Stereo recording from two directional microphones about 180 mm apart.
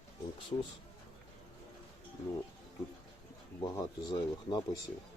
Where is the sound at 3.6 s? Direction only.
25° left (ahead or behind).